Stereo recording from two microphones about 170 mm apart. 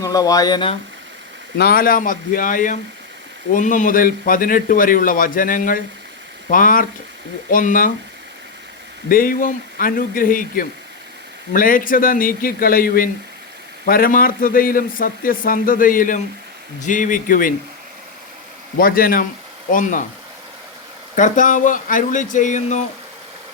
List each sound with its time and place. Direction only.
0.0 s speech: 20° left (ahead or behind)
1.5 s a man's voice: 65° left (ahead or behind)
9.0 s a man's voice: 55° left (ahead or behind)
18.8 s a man's voice: 60° left (ahead or behind)
21.2 s a man's voice: 50° left (ahead or behind)